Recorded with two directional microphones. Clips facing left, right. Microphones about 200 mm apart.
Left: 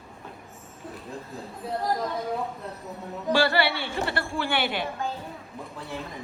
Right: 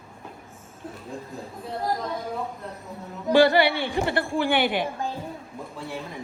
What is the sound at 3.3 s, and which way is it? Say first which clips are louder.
A woman's voice: right 6 dB; 15° right (ahead or behind).